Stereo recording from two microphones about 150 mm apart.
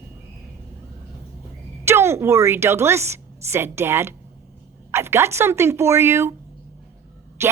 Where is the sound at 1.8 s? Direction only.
15° right (ahead or behind).